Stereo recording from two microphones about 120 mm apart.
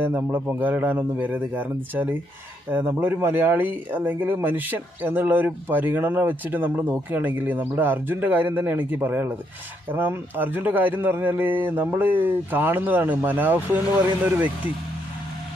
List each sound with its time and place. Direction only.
0.0 s speech: 15° right (ahead or behind)